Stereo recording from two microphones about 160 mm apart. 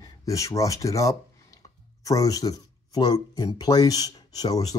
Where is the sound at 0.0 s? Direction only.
20° left (ahead or behind).